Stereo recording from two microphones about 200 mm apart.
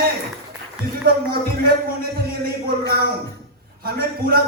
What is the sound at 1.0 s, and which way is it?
Speech, 50° right (ahead or behind).